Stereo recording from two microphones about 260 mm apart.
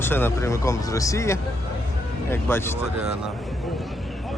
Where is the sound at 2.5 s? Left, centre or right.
Centre.